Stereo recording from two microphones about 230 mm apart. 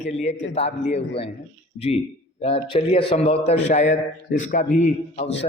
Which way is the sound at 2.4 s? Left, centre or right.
Left.